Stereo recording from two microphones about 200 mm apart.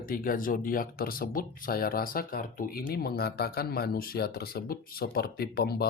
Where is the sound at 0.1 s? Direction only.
45° left (ahead or behind).